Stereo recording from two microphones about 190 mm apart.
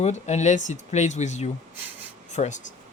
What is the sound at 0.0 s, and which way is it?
Speech, 35° left (ahead or behind).